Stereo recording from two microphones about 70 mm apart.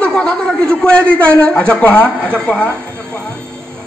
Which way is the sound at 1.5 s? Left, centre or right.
Centre.